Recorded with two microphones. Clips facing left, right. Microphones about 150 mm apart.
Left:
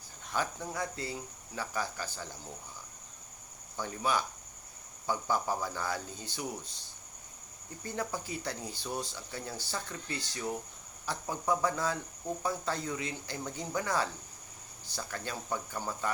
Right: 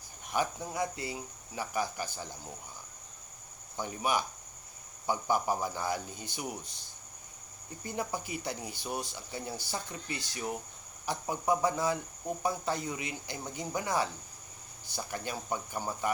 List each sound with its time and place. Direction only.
0.3 s speech: 15° right (ahead or behind)
3.8 s speech: 15° right (ahead or behind)
7.9 s speech: 15° right (ahead or behind)